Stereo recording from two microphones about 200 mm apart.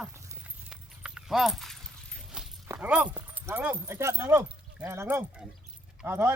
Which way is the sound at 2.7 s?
5° right (ahead or behind).